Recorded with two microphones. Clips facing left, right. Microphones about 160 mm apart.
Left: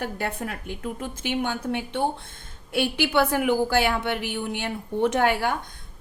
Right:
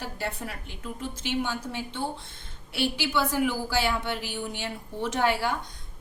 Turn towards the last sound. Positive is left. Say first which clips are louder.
# left 3 dB
turn(degrees=55)  # may be behind; listen again after turning